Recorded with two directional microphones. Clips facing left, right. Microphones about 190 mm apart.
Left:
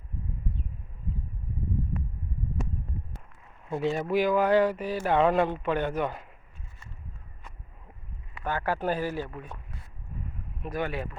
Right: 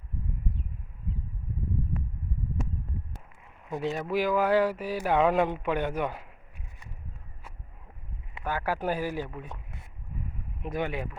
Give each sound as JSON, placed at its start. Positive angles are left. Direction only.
{"t": 3.8, "sound": "speech", "side_deg": 0}
{"t": 8.4, "sound": "speech", "side_deg": -10}
{"t": 9.4, "sound": "a sound", "side_deg": -20}
{"t": 10.6, "sound": "speech", "side_deg": -20}